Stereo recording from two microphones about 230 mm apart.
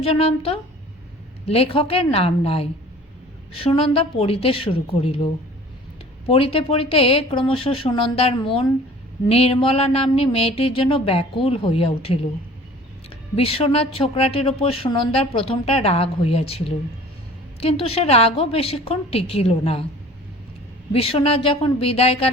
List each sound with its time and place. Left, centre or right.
0.0 s speech: left
20.9 s speech: left